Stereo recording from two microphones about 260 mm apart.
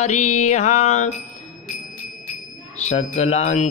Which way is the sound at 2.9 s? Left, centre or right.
Left.